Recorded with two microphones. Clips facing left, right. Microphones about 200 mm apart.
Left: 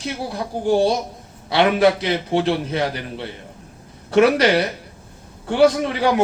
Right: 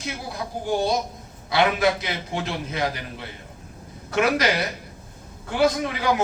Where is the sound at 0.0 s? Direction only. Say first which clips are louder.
Left 5 dB; 35° left (ahead or behind).